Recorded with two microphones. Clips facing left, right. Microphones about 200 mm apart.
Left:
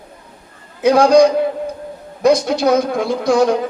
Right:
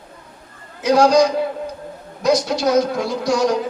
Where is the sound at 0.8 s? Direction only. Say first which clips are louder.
Left 3 dB; 55° left (ahead or behind).